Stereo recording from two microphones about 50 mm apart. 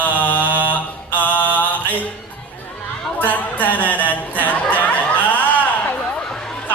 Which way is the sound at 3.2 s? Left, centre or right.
Left.